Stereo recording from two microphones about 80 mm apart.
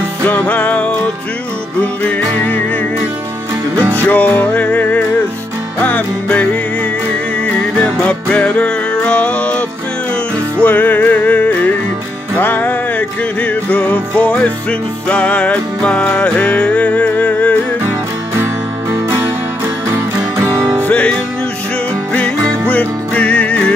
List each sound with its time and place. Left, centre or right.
0.2 s music: centre
3.9 s music: left
17.8 s music: right
20.8 s music: centre